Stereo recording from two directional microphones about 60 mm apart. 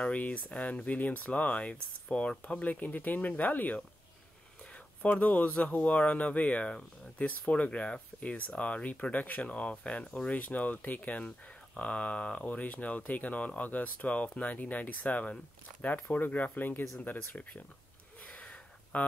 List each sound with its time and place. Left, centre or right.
0.0 s speech: left
5.0 s speech: left
18.2 s a sound: left